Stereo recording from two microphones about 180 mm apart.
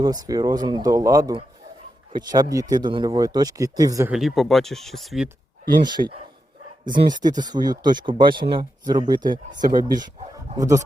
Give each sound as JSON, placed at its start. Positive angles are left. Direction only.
{"t": 0.0, "sound": "speech", "side_deg": -20}
{"t": 4.1, "sound": "speech", "side_deg": 0}
{"t": 5.8, "sound": "speech", "side_deg": -25}
{"t": 9.5, "sound": "speech", "side_deg": -45}
{"t": 9.8, "sound": "speech", "side_deg": -25}